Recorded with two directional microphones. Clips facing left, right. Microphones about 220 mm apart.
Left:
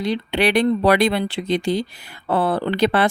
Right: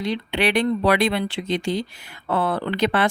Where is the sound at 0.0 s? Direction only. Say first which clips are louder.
Left 3 dB; 35° left (ahead or behind).